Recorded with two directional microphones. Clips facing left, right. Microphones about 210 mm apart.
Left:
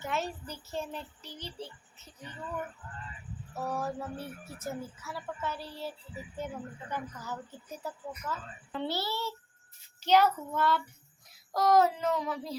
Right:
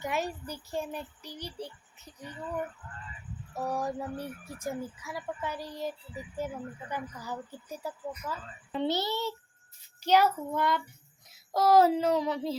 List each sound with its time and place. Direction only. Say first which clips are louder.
0.0 s speech: right 2 dB; 15° right (ahead or behind)
3.5 s speech: right 2 dB; 15° right (ahead or behind)
11.3 s child singing: right 2 dB; 25° right (ahead or behind)
12.2 s speech: right 5 dB; 25° right (ahead or behind)